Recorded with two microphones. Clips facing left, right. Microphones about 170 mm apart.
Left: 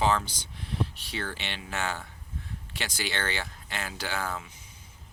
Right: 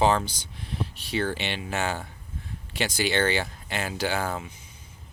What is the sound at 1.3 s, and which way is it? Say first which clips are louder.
Speech: right 6 dB; 20° right (ahead or behind).